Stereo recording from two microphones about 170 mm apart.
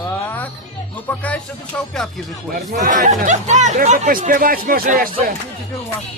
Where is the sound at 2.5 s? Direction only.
55° right (ahead or behind).